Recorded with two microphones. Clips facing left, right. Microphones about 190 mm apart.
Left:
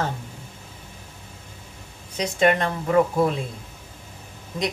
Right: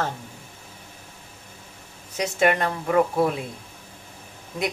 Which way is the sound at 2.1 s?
5° right (ahead or behind).